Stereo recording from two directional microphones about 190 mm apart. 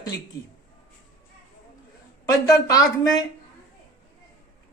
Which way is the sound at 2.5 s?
20° left (ahead or behind).